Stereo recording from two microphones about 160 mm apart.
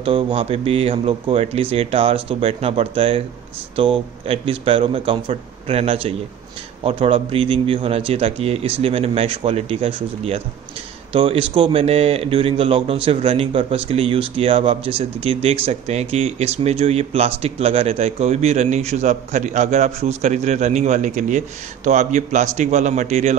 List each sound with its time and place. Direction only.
0.0 s speech: 35° right (ahead or behind)